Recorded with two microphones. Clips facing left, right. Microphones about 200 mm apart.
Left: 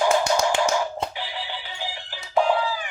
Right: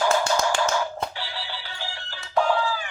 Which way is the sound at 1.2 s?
15° left (ahead or behind).